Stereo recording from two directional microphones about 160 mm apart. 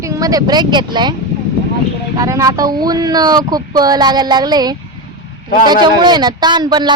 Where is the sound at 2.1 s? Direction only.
20° right (ahead or behind).